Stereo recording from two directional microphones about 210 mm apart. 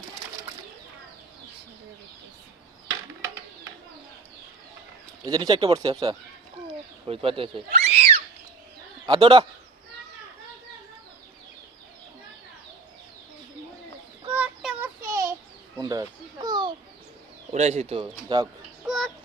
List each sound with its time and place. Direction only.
5.2 s speech: 20° right (ahead or behind)
14.3 s child singing: 5° right (ahead or behind)
15.8 s speech: 20° right (ahead or behind)
17.5 s speech: 30° right (ahead or behind)
18.9 s chicken: centre (ahead or behind)